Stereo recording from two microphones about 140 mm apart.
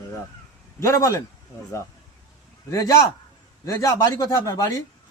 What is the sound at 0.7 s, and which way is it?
Speech, 20° left (ahead or behind).